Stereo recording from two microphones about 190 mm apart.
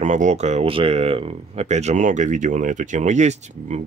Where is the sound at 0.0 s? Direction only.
40° right (ahead or behind).